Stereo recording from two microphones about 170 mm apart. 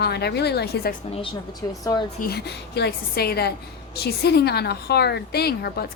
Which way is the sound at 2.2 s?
70° left (ahead or behind).